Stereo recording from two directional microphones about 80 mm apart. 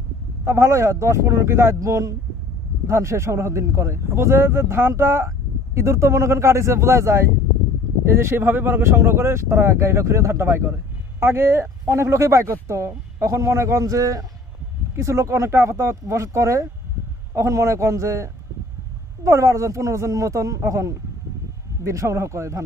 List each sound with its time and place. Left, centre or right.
0.5 s speech: right